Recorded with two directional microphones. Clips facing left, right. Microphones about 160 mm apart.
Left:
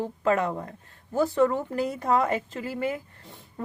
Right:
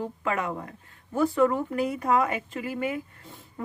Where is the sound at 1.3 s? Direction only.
25° left (ahead or behind).